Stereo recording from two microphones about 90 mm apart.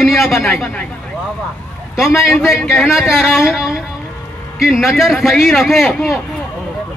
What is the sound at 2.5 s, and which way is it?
A man's voice, centre (ahead or behind).